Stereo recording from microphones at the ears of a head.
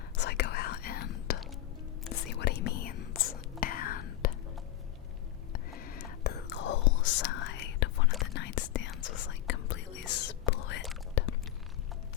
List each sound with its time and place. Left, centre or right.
0.2 s whispering: left
5.7 s whispering: left